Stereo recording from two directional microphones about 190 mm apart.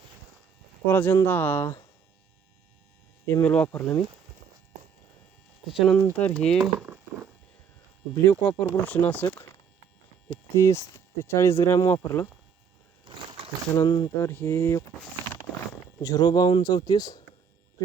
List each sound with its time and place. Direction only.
0.9 s speech: 10° left (ahead or behind)
3.2 s speech: 10° left (ahead or behind)
5.7 s speech: centre (ahead or behind)
8.1 s speech: 10° left (ahead or behind)
10.5 s speech: 15° left (ahead or behind)
13.7 s speech: 20° left (ahead or behind)
16.0 s speech: 20° left (ahead or behind)